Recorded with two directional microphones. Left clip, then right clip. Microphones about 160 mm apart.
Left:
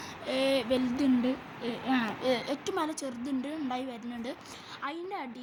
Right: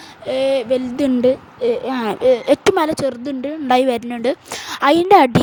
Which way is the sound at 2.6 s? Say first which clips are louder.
Right 18 dB; 65° right (ahead or behind).